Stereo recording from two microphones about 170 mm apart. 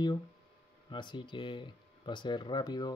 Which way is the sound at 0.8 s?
25° left (ahead or behind).